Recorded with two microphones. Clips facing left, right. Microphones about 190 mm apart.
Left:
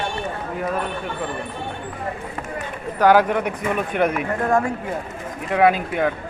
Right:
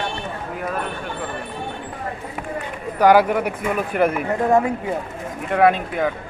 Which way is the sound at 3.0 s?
10° right (ahead or behind).